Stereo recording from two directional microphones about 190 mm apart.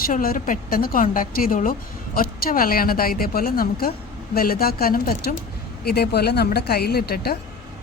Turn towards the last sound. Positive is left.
turn(degrees=55)  # may be behind; listen again after turning